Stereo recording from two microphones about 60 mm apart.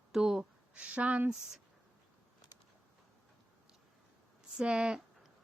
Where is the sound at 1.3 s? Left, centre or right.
Centre.